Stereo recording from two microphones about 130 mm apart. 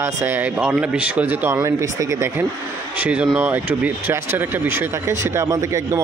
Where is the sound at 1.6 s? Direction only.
25° right (ahead or behind).